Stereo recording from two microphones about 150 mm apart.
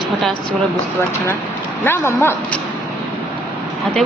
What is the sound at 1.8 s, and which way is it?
Speech, 15° left (ahead or behind).